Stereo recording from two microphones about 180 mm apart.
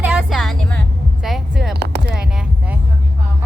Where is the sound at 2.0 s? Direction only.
5° right (ahead or behind).